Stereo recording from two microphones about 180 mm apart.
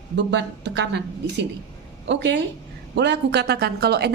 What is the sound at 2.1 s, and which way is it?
Speech, 75° right (ahead or behind).